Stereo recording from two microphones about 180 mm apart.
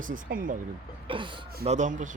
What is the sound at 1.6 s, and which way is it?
Speech, 40° right (ahead or behind).